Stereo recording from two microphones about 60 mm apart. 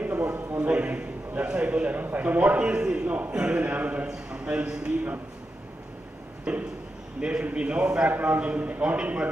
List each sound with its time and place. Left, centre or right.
0.0 s a sound: right
0.6 s a man's voice: right
6.5 s a man's voice: centre